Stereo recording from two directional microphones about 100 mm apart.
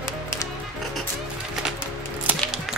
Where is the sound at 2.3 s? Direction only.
15° right (ahead or behind).